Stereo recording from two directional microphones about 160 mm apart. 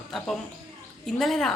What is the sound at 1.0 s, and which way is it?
Speech, centre (ahead or behind).